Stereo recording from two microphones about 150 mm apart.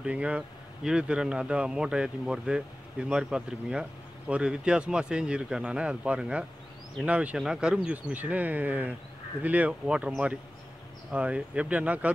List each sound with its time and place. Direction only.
0.0 s speech: 5° right (ahead or behind)